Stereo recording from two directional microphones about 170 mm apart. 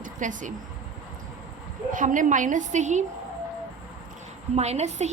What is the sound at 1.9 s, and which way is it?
A woman's voice, 50° right (ahead or behind).